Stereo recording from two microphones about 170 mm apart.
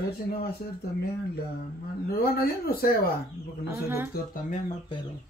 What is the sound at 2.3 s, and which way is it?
Speech, 65° left (ahead or behind).